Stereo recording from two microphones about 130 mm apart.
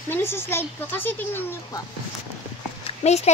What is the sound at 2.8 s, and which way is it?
Speech, 60° left (ahead or behind).